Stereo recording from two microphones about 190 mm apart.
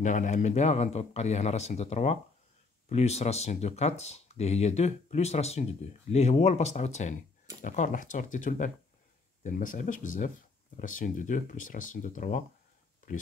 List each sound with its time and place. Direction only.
0.0 s speech: 40° left (ahead or behind)